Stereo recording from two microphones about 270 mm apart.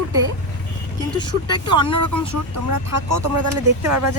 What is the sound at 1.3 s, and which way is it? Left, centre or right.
Speech, centre.